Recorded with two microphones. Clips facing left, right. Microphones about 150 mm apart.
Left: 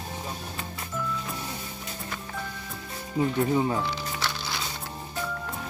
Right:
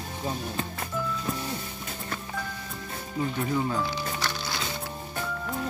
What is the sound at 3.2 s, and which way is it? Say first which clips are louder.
Speech: left 4 dB; 30° left (ahead or behind).